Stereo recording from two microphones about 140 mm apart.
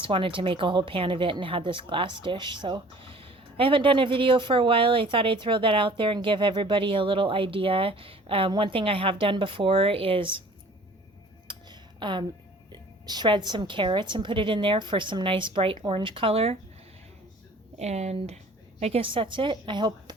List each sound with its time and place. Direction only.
0.0 s speech: 40° right (ahead or behind)
11.7 s a sound: 35° right (ahead or behind)
12.7 s speech: 30° right (ahead or behind)
17.7 s speech: 55° right (ahead or behind); by 20.1 s 35° right (ahead or behind)